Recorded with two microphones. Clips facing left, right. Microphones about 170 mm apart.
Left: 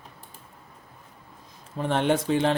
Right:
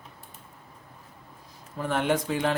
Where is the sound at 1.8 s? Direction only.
30° left (ahead or behind).